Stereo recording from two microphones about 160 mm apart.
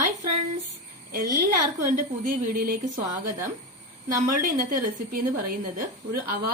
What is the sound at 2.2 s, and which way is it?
Speech, 60° right (ahead or behind).